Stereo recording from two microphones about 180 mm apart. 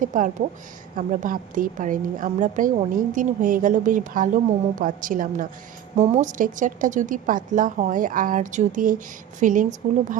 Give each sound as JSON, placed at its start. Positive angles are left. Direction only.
{"t": 0.0, "sound": "speech", "side_deg": -45}